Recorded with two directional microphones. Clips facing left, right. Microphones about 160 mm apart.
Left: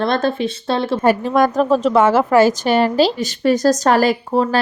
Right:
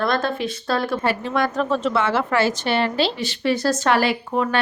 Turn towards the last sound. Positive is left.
turn(degrees=35)  # may be behind; listen again after turning